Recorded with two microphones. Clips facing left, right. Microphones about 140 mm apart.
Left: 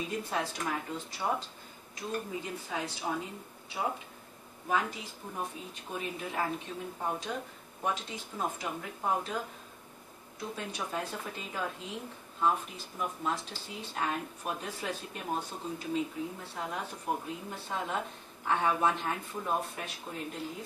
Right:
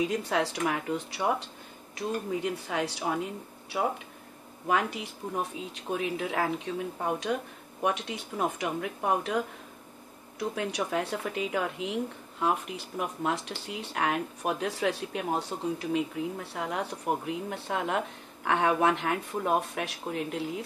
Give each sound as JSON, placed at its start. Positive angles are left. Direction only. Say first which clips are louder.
{"t": 0.0, "sound": "speech", "louder": "right 6 dB", "side_deg": -80}
{"t": 4.6, "sound": "speech", "louder": "right 4 dB", "side_deg": -75}
{"t": 10.5, "sound": "speech", "louder": "right 6 dB", "side_deg": -75}